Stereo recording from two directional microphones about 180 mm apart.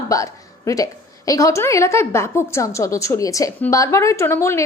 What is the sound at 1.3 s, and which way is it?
A woman's voice, 15° left (ahead or behind).